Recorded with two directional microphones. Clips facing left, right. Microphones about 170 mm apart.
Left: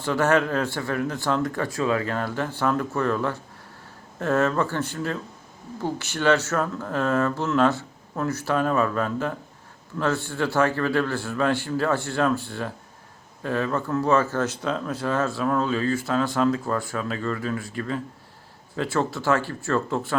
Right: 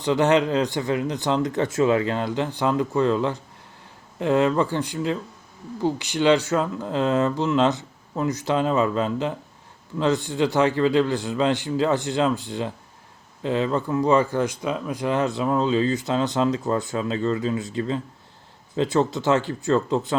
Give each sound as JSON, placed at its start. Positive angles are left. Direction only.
{"t": 0.0, "sound": "speech", "side_deg": -15}